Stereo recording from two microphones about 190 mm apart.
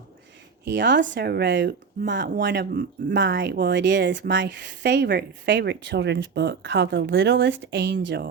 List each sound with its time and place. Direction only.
0.6 s speech: 65° right (ahead or behind)